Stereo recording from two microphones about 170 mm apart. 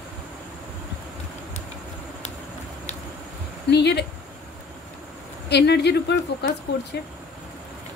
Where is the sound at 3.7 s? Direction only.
80° left.